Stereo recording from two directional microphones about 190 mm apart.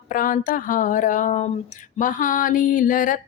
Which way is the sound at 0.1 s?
45° left (ahead or behind).